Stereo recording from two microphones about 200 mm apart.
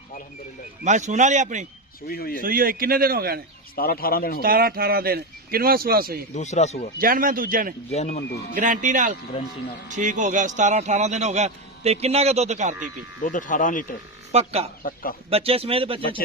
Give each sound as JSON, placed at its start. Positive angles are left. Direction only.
{"t": 0.9, "sound": "a man's voice", "side_deg": -35}
{"t": 2.0, "sound": "speech", "side_deg": 50}
{"t": 2.4, "sound": "speech", "side_deg": -45}
{"t": 3.8, "sound": "speech", "side_deg": 50}
{"t": 4.4, "sound": "speech", "side_deg": -50}
{"t": 6.3, "sound": "speech", "side_deg": 35}
{"t": 7.0, "sound": "speech", "side_deg": -45}
{"t": 7.9, "sound": "speech", "side_deg": 35}
{"t": 8.5, "sound": "a man's voice", "side_deg": -40}
{"t": 13.2, "sound": "speech", "side_deg": 40}
{"t": 14.3, "sound": "a man's voice", "side_deg": -30}